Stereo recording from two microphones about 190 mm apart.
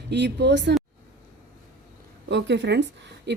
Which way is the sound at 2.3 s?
65° right (ahead or behind).